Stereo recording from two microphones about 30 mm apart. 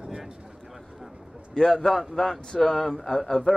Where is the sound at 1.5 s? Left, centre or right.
Centre.